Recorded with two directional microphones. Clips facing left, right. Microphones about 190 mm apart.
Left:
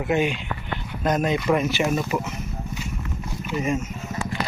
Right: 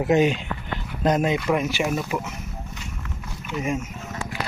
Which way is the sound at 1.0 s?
25° right (ahead or behind).